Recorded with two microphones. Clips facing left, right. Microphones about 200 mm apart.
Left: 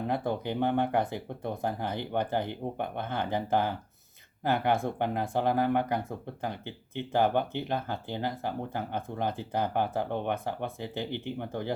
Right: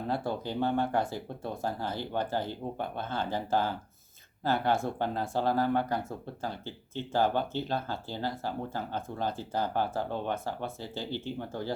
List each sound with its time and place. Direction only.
0.1 s speech: 20° left (ahead or behind)